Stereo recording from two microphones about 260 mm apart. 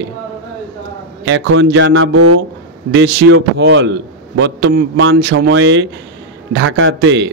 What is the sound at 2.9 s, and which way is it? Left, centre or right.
A man's voice, right.